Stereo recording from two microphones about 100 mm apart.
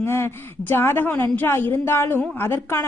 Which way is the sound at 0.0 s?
25° left (ahead or behind).